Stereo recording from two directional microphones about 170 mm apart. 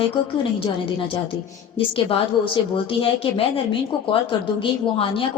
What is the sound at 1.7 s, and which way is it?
A woman's voice, 30° left (ahead or behind).